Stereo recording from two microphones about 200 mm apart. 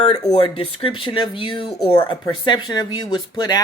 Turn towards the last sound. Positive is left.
turn(degrees=20)  # may be behind; listen again after turning